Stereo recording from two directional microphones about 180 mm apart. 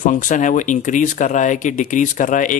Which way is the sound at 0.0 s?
45° left (ahead or behind).